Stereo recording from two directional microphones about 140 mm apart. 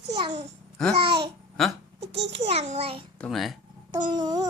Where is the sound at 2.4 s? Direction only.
50° right (ahead or behind).